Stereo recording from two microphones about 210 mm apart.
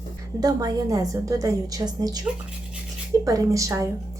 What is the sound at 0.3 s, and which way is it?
A woman's voice, 15° right (ahead or behind).